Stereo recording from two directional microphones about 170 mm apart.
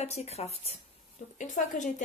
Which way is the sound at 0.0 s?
40° left (ahead or behind).